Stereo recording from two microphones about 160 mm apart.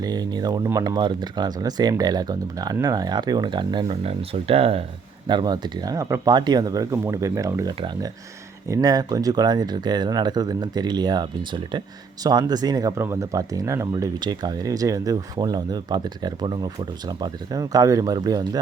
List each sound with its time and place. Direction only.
0.0 s speech: 25° right (ahead or behind)
5.3 s speech: 25° right (ahead or behind)